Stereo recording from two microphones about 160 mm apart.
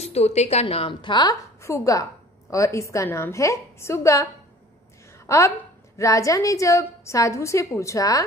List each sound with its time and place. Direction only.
0.0 s a woman's voice: 40° left (ahead or behind); by 8.3 s 20° left (ahead or behind)